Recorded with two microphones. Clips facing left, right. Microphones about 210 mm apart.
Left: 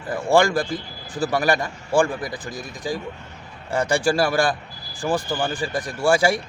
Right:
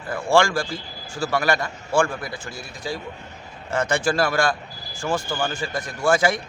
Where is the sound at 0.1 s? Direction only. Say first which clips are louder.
Left 1 dB; 15° left (ahead or behind).